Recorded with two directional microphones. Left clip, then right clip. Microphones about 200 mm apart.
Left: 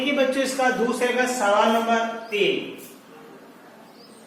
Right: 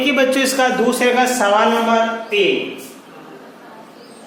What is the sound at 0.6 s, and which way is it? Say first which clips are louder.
Speech: right 4 dB; 45° right (ahead or behind).